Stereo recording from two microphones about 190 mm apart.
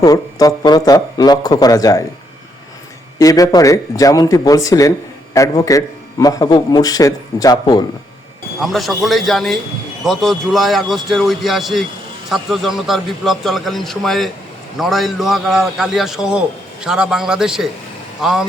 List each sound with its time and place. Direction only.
0.0 s speech: 20° left (ahead or behind)
3.2 s speech: 15° left (ahead or behind)
8.6 s a man's voice: centre (ahead or behind)